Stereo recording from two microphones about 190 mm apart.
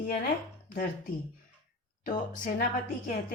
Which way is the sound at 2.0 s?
50° left (ahead or behind).